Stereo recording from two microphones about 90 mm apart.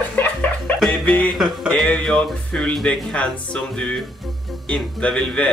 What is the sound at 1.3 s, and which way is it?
Speech, 5° right (ahead or behind).